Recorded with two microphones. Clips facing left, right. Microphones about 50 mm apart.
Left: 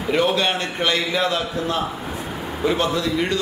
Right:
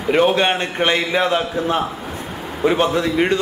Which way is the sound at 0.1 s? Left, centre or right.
Right.